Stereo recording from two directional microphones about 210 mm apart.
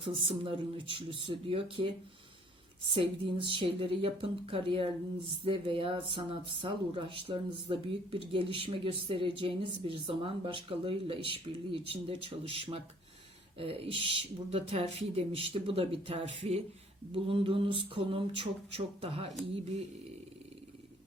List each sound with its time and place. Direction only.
0.0 s speech: 25° right (ahead or behind)